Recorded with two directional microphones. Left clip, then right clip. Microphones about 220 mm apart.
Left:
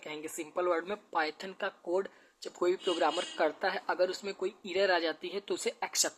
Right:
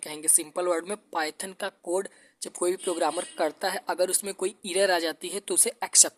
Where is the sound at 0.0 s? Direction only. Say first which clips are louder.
Right 9 dB; 45° right (ahead or behind).